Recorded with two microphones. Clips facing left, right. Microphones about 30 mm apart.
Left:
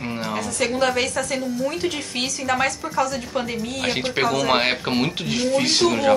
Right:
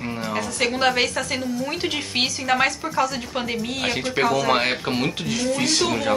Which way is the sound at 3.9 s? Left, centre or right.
Centre.